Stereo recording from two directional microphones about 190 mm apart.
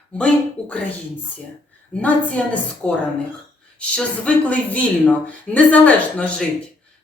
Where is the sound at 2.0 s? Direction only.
5° left (ahead or behind).